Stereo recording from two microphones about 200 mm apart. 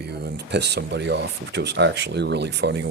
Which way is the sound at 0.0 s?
55° right (ahead or behind).